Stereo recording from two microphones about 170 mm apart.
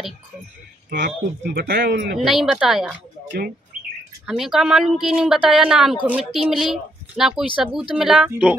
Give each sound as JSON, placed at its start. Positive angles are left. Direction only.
{"t": 0.8, "sound": "speech", "side_deg": -55}
{"t": 2.1, "sound": "speech", "side_deg": 0}
{"t": 3.3, "sound": "speech", "side_deg": -65}
{"t": 4.3, "sound": "speech", "side_deg": 0}